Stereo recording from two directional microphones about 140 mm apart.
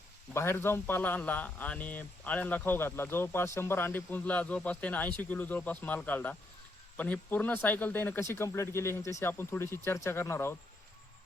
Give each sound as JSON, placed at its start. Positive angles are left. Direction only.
{"t": 0.3, "sound": "speech", "side_deg": 15}